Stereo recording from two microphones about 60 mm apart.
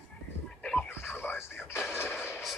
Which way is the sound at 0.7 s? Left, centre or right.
Left.